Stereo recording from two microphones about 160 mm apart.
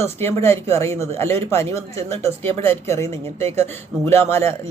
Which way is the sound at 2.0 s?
40° right (ahead or behind).